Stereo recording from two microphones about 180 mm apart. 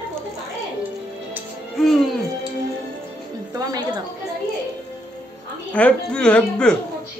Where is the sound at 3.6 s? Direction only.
20° right (ahead or behind).